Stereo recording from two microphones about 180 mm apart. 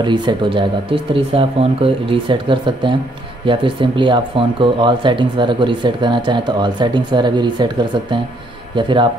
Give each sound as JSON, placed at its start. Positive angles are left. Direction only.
{"t": 0.0, "sound": "speech", "side_deg": -25}